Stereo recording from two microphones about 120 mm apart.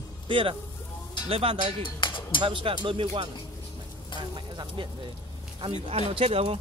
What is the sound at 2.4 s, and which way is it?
A man's voice, 45° right (ahead or behind).